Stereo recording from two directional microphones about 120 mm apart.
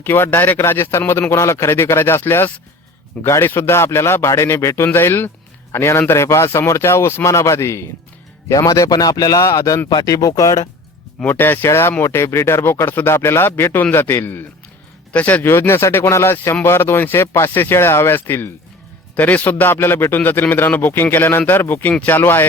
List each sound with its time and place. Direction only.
0.0 s speech: 20° left (ahead or behind)
11.3 s a man's voice: 15° left (ahead or behind)